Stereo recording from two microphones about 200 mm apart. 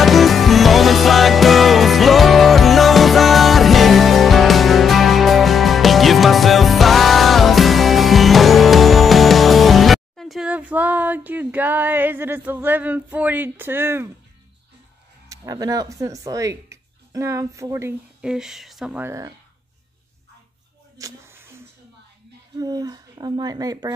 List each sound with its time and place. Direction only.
0.0 s music: centre (ahead or behind)
15.2 s speech: 15° right (ahead or behind)
18.2 s speech: 5° right (ahead or behind)
21.0 s a sound: 10° right (ahead or behind)
22.6 s speech: 20° right (ahead or behind)